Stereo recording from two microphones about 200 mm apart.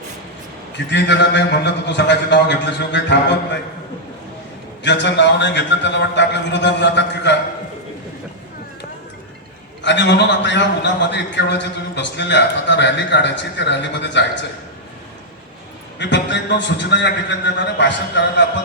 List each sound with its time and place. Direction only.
0.9 s a man's voice: 60° left (ahead or behind)
4.8 s a man's voice: 60° left (ahead or behind)
9.8 s a man's voice: 60° left (ahead or behind)
16.0 s a man's voice: 60° left (ahead or behind)